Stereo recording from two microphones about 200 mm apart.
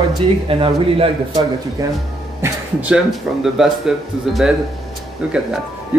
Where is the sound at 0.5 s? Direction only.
25° right (ahead or behind).